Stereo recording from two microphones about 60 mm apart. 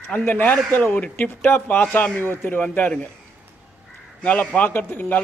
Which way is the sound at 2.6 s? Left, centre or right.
Left.